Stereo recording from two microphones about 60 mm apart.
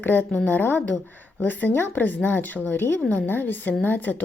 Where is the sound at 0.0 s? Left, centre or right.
Left.